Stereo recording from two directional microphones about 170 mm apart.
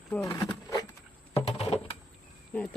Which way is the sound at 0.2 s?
20° left (ahead or behind).